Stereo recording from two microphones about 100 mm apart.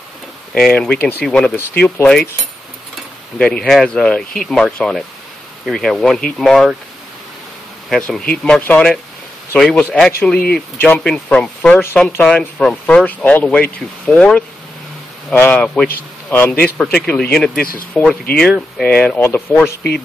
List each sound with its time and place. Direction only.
0.6 s speech: 5° left (ahead or behind)
1.6 s speech: 20° left (ahead or behind)
3.3 s speech: 10° left (ahead or behind)
7.9 s speech: 5° left (ahead or behind)
16.3 s speech: 20° left (ahead or behind)
16.9 s speech: 10° left (ahead or behind)